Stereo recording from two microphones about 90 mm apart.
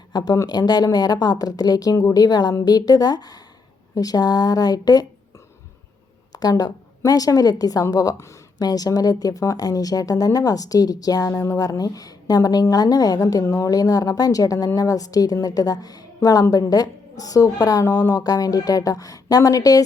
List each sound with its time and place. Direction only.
0.1 s a woman's voice: 50° left (ahead or behind)
6.3 s a woman's voice: 45° left (ahead or behind)